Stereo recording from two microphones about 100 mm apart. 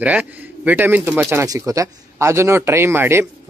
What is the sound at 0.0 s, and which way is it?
Speech, 15° right (ahead or behind).